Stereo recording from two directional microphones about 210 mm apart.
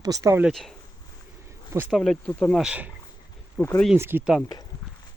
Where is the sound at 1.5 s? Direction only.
15° right (ahead or behind).